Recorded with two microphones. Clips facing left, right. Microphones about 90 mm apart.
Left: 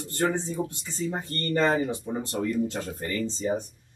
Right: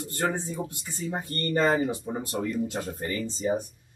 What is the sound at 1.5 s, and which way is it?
Speech, 30° right (ahead or behind).